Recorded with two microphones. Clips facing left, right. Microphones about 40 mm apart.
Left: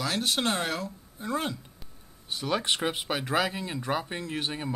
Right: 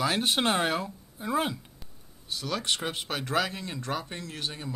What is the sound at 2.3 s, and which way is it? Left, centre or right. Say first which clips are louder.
Speech: left 2 dB; left.